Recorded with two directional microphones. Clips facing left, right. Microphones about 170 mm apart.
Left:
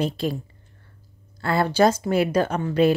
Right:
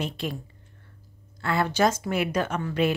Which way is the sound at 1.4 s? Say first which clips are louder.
Left 4 dB; 35° left (ahead or behind).